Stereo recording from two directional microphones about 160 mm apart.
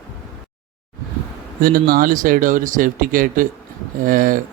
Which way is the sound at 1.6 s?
60° right (ahead or behind).